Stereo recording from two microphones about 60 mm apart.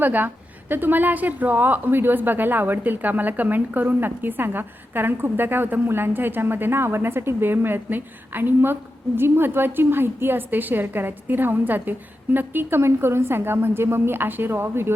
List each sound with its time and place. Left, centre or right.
0.0 s speech: right